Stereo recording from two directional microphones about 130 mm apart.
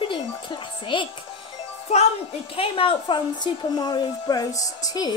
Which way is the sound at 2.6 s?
45° left (ahead or behind).